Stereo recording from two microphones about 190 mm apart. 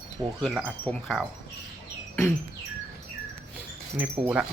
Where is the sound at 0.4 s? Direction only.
Centre (ahead or behind).